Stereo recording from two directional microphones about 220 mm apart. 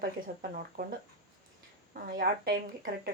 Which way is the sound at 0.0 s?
40° right (ahead or behind).